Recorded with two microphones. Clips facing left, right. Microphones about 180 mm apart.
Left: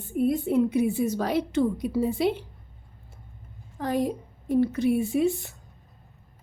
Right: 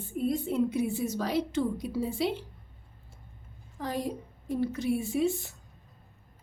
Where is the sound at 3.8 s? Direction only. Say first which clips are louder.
Left 6 dB; 55° left (ahead or behind).